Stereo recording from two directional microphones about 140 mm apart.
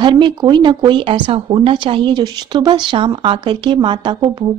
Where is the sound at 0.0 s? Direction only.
35° right (ahead or behind).